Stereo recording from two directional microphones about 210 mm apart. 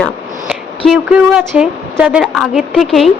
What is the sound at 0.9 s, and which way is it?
A woman's voice, 5° right (ahead or behind).